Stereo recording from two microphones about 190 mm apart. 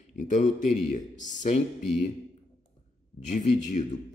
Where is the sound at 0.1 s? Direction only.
40° left (ahead or behind).